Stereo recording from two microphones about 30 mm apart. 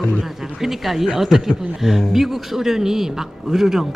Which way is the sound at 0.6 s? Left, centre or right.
Centre.